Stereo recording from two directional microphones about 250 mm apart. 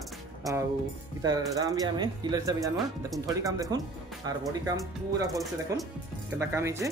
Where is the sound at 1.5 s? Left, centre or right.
Centre.